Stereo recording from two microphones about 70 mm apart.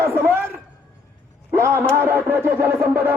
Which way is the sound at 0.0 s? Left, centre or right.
Right.